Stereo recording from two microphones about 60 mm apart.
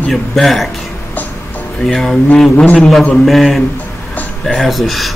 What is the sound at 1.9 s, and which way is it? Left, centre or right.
Speech, centre.